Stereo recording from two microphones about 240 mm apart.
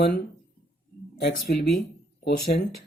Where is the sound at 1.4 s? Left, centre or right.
Left.